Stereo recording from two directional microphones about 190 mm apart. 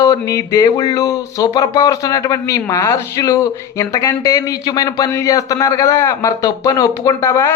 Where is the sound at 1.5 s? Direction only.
20° left (ahead or behind).